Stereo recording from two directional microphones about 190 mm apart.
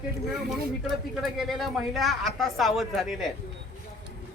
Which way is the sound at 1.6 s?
Centre (ahead or behind).